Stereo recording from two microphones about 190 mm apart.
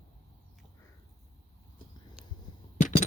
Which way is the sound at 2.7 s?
35° left (ahead or behind).